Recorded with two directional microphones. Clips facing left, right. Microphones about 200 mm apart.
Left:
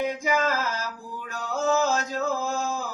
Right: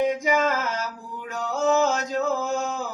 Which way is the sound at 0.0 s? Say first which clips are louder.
Right 3 dB; 20° right (ahead or behind).